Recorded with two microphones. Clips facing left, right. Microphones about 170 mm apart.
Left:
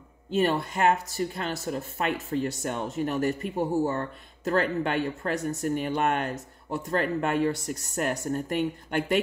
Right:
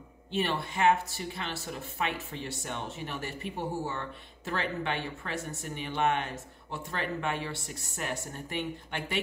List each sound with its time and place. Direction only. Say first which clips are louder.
0.3 s speech: left 6 dB; 45° left (ahead or behind)